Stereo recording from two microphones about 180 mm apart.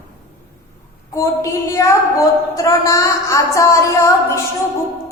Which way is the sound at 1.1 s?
15° left (ahead or behind).